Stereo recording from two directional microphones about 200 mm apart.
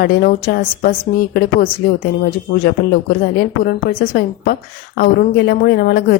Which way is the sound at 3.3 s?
50° left (ahead or behind).